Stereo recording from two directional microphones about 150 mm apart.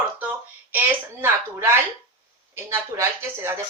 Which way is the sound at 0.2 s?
10° right (ahead or behind).